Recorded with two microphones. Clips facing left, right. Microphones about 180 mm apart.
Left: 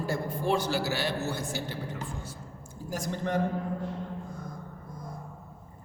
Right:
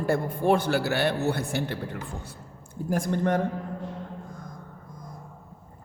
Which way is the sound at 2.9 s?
55° right (ahead or behind).